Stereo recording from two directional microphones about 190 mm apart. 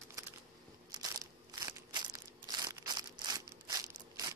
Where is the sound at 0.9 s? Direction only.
20° right (ahead or behind).